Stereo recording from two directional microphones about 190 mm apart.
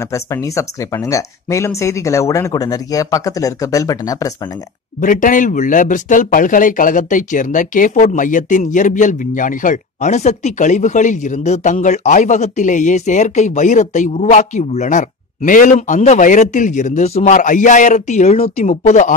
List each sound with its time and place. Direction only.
0.1 s speech: 15° left (ahead or behind)
5.0 s speech: 45° left (ahead or behind)